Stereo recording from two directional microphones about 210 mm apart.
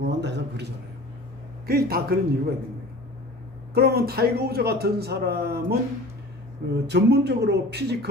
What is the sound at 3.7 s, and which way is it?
Speech, 50° right (ahead or behind).